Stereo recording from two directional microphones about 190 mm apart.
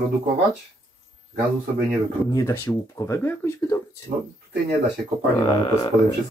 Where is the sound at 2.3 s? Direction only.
15° left (ahead or behind).